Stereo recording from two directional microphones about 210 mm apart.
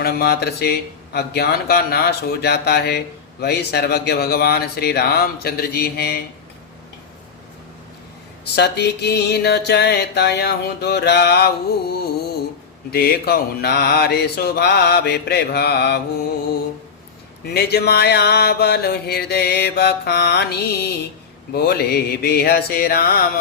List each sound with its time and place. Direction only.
0.0 s music: 50° left (ahead or behind)
8.5 s music: 50° left (ahead or behind)
17.4 s music: 50° left (ahead or behind)